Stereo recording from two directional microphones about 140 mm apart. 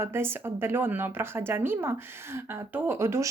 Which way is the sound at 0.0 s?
15° right (ahead or behind).